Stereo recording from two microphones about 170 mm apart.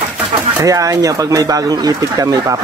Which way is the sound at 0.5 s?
20° right (ahead or behind).